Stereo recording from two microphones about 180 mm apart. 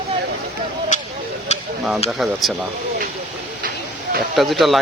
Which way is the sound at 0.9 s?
45° left (ahead or behind).